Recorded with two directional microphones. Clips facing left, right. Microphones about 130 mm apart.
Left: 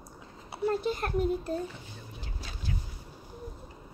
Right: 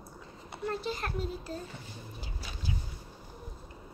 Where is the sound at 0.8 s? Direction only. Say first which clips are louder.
Left 6 dB; 55° left (ahead or behind).